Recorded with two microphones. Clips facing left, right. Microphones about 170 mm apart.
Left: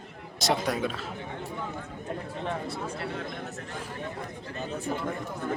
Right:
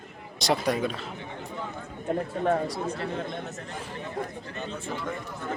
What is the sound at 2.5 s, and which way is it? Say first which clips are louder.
Speech: right 8 dB; 35° right (ahead or behind).